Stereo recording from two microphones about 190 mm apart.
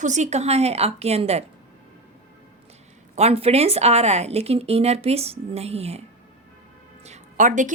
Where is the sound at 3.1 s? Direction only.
30° right (ahead or behind).